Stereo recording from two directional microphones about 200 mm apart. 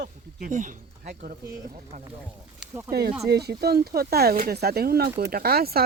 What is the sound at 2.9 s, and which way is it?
Speech, 50° right (ahead or behind).